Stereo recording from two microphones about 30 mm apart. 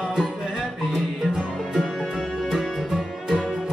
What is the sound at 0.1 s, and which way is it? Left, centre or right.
Music, centre.